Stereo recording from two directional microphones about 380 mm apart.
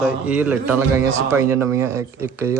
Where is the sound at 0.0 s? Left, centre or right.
Centre.